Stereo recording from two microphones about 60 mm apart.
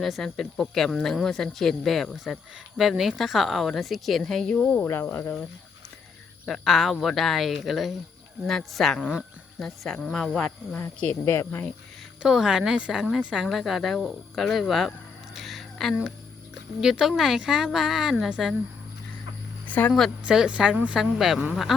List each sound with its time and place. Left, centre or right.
0.0 s a woman's voice: centre
4.4 s speech: left
4.9 s speech: left
6.4 s a woman's voice: centre
11.0 s speech: left
12.2 s a woman's voice: centre
15.4 s a sound: centre
16.8 s a woman's voice: centre
19.6 s a sound: left
20.2 s a woman's voice: centre
20.9 s a woman's voice: centre